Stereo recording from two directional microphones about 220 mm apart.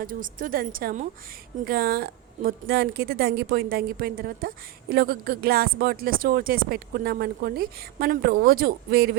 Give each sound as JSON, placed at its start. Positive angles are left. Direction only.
{"t": 0.0, "sound": "a woman's voice", "side_deg": -40}